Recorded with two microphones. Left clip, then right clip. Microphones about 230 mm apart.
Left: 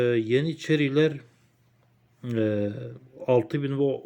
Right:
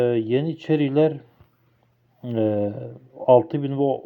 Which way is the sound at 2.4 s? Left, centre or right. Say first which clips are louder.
Right 4 dB; right.